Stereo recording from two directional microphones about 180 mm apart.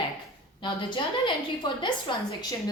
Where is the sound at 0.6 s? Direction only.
25° left (ahead or behind).